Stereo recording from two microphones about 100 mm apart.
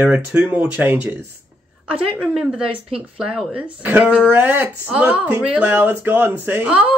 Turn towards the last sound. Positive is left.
turn(degrees=-20)  # may be behind; listen again after turning